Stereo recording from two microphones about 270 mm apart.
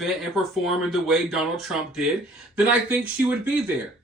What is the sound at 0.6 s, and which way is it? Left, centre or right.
Speech, centre.